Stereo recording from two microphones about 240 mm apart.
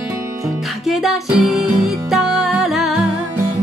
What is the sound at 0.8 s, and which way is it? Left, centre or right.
Music, centre.